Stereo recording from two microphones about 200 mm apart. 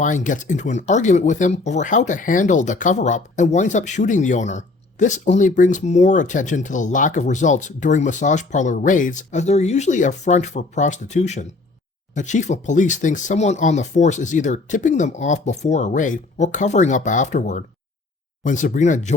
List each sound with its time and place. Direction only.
0.0 s speech: 40° left (ahead or behind)